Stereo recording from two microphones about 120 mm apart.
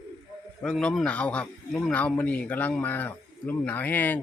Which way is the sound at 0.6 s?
5° left (ahead or behind).